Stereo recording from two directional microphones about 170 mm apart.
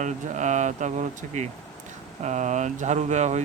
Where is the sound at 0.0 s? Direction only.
45° right (ahead or behind).